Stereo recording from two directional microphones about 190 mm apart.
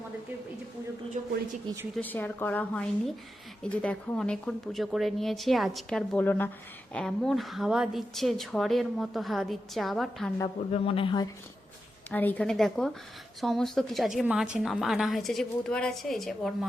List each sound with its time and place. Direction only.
1.2 s a sound: 40° right (ahead or behind)
1.6 s speech: 15° right (ahead or behind)
2.0 s a woman's voice: 10° left (ahead or behind)
10.7 s speech: 30° left (ahead or behind)
12.1 s speech: 10° left (ahead or behind)